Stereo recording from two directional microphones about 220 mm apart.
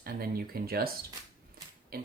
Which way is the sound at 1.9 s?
45° right (ahead or behind).